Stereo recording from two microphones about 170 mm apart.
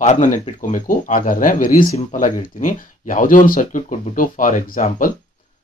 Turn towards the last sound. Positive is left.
turn(degrees=55)  # may be behind; listen again after turning